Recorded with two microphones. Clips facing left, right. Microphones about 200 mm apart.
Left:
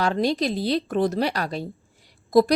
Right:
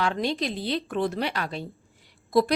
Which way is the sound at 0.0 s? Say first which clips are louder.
Left 4 dB; 40° left (ahead or behind).